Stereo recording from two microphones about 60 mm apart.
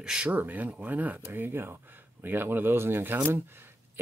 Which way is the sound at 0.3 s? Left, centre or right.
Right.